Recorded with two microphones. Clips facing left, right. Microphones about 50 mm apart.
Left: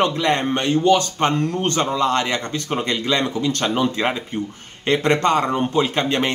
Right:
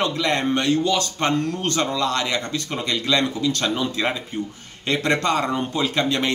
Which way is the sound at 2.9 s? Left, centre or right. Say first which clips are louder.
Right 2 dB; left.